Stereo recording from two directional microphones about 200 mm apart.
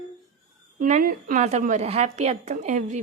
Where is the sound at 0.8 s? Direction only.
40° right (ahead or behind).